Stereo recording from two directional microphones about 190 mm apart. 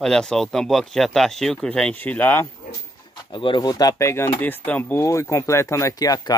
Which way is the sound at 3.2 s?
25° left (ahead or behind).